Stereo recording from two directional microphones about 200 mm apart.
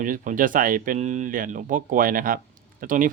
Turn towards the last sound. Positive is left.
turn(degrees=-40)  # may be behind; listen again after turning